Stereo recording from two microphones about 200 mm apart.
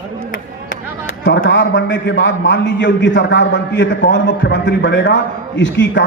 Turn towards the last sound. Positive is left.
turn(degrees=65)  # may be behind; listen again after turning